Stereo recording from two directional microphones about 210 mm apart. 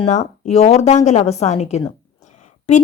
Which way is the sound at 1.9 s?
35° left (ahead or behind).